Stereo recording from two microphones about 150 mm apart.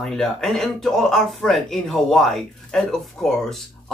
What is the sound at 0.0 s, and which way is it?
Speech, 5° left (ahead or behind).